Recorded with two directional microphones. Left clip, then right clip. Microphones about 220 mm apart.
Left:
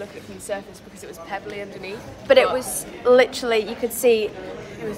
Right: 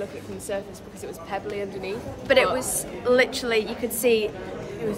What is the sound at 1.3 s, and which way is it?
Speech, 20° right (ahead or behind).